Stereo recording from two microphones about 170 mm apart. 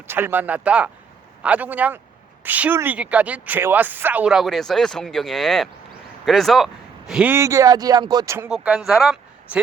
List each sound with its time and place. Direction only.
0.1 s speech: 10° right (ahead or behind)
8.4 s speech: 5° right (ahead or behind)